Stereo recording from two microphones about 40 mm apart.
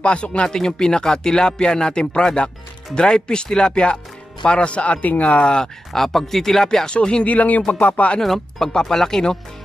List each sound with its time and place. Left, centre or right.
0.0 s speech: left
5.4 s speech: left
5.9 s speech: centre
6.9 s speech: left
7.2 s speech: left
8.2 s speech: centre